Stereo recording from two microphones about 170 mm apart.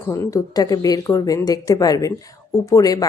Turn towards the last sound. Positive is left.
turn(degrees=20)  # may be behind; listen again after turning